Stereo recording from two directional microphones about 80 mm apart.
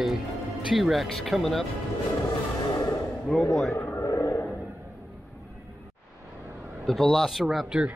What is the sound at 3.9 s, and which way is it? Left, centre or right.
Vehicle, left.